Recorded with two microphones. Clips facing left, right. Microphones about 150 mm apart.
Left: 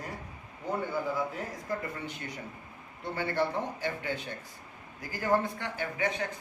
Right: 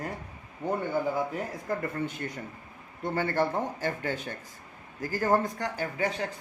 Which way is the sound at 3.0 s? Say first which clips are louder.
Right 3 dB; 45° right (ahead or behind).